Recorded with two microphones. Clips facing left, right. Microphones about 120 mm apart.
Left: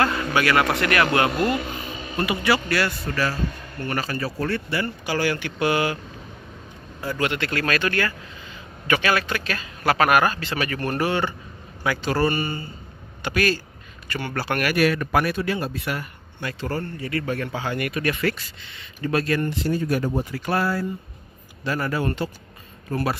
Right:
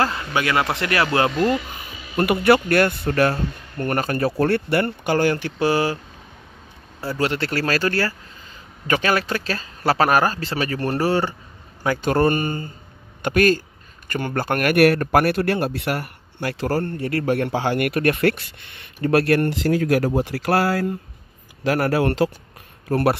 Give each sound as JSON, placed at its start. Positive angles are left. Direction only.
{"t": 0.0, "sound": "a man's voice", "side_deg": -25}
{"t": 2.1, "sound": "speech", "side_deg": -55}
{"t": 7.1, "sound": "speech", "side_deg": -35}
{"t": 22.8, "sound": "speech", "side_deg": -65}